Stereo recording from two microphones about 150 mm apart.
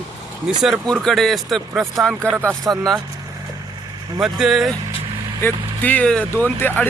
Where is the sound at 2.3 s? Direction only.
15° right (ahead or behind).